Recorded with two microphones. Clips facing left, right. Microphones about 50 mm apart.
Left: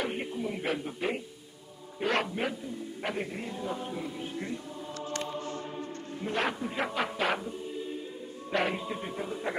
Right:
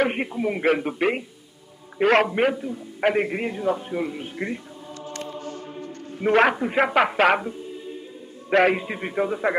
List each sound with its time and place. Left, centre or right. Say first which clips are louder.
0.0 s a man's voice: right 10 dB; right
2.0 s a man's voice: right 11 dB; right
3.7 s a man's voice: right 8 dB; right
5.1 s music: right 2 dB; left
6.2 s a man's voice: right 13 dB; right